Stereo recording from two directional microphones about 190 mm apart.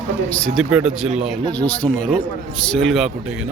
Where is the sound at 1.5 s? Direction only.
10° left (ahead or behind).